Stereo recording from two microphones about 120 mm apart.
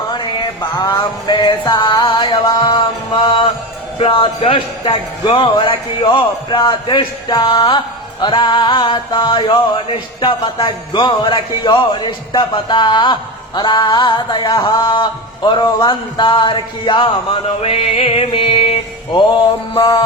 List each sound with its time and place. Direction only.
0.1 s mantra: 40° left (ahead or behind)
1.5 s speech: 40° left (ahead or behind)
8.2 s a sound: 40° left (ahead or behind)